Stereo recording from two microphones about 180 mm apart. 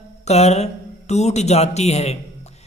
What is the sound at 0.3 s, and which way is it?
Speech, 35° left (ahead or behind).